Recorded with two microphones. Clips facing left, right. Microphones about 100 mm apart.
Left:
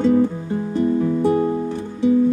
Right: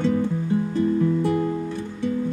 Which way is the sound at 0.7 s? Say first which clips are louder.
Left 4 dB; 20° left (ahead or behind).